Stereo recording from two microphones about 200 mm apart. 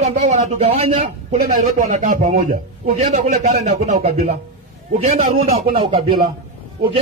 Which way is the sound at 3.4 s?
35° right (ahead or behind).